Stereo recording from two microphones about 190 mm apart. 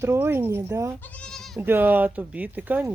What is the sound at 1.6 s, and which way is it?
Speech, 10° right (ahead or behind).